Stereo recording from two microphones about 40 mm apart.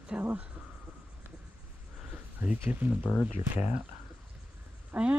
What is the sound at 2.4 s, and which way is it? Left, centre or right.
Speech, right.